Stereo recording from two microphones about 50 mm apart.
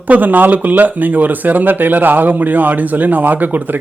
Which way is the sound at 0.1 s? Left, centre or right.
Right.